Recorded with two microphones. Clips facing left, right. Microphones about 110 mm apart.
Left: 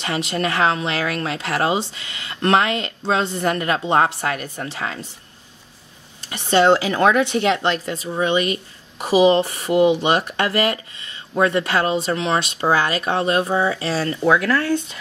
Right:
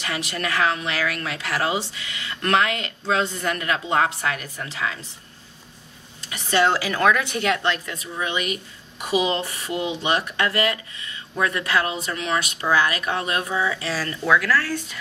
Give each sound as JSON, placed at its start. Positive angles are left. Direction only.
{"t": 0.0, "sound": "a woman's voice", "side_deg": 25}
{"t": 6.3, "sound": "a woman's voice", "side_deg": 25}